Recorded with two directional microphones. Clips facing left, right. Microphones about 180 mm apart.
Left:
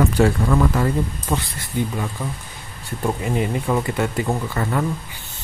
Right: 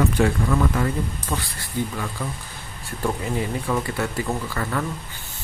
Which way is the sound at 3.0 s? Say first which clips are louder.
Left 3 dB; 20° left (ahead or behind).